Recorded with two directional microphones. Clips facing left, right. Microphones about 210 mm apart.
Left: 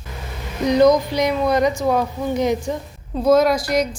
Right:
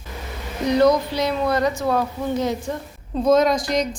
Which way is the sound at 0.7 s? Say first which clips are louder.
Left 3 dB; 15° left (ahead or behind).